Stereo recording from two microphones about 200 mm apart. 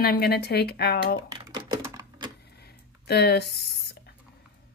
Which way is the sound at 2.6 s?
55° left (ahead or behind).